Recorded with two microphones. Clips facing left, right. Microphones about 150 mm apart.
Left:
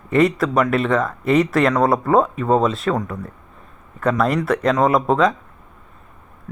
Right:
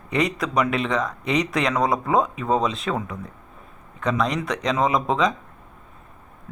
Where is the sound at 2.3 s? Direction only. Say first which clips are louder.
Left 5 dB; 45° left (ahead or behind).